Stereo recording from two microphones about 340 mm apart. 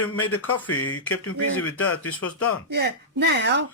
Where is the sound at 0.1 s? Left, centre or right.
Left.